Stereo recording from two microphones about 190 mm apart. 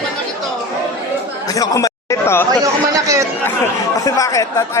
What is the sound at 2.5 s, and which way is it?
Chatter, 15° right (ahead or behind).